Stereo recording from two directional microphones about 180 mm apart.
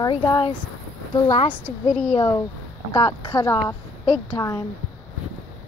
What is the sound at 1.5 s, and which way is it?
Speech, 5° left (ahead or behind).